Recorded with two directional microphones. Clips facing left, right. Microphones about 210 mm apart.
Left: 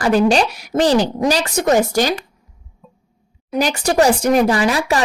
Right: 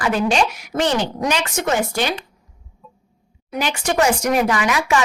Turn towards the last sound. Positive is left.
turn(degrees=35)  # may be behind; listen again after turning